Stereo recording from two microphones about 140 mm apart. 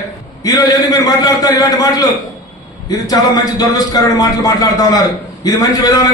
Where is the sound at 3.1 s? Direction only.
25° left (ahead or behind).